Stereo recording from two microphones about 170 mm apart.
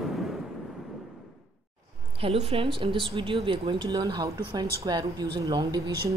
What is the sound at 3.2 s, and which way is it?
Speech, 30° right (ahead or behind).